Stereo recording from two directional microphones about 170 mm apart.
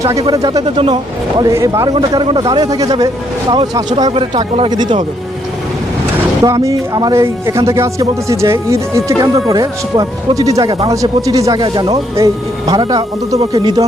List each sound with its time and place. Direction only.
0.0 s speech: 20° right (ahead or behind)
6.4 s speech: 20° right (ahead or behind)